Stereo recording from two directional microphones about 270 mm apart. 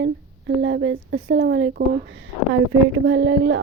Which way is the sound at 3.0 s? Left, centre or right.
Right.